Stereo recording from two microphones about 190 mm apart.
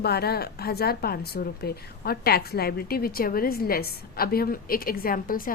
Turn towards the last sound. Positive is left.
turn(degrees=50)  # may be behind; listen again after turning